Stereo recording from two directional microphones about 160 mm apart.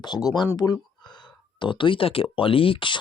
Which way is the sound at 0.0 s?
25° left (ahead or behind).